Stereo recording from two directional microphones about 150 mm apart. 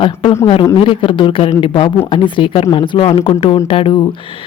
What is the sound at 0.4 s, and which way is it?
Speech, 30° left (ahead or behind).